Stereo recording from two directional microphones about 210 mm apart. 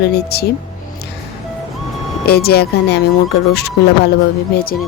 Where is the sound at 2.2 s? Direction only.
50° left (ahead or behind).